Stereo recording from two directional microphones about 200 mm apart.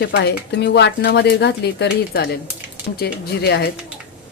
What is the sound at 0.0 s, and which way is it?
A woman's voice, 60° left (ahead or behind).